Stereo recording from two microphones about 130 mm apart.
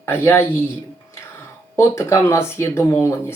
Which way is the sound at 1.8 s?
20° left (ahead or behind).